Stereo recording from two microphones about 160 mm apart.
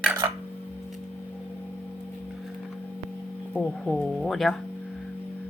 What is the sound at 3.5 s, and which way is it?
Speech, 10° left (ahead or behind).